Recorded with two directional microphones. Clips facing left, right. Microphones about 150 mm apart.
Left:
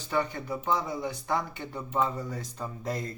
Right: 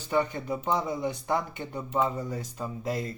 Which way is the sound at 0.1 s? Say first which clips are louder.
Right 2 dB; 20° right (ahead or behind).